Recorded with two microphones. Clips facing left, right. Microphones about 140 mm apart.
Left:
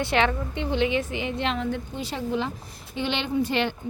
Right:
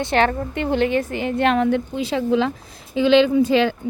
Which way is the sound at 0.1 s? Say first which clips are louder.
Right 7 dB; 45° right (ahead or behind).